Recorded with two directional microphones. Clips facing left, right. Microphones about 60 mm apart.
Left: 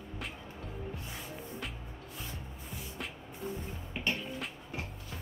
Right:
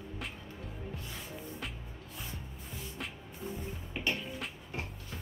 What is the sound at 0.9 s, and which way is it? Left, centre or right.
Music, centre.